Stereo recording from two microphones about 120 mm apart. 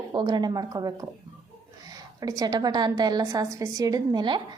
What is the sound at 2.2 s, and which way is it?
A woman's voice, 30° right (ahead or behind).